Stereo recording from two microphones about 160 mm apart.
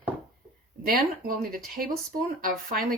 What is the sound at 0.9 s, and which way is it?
Speech, 65° right (ahead or behind).